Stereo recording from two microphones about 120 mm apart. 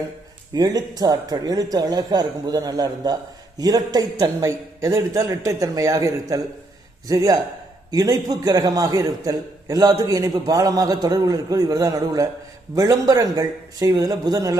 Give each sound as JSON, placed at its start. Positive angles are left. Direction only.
{"t": 0.5, "sound": "a man's voice", "side_deg": -30}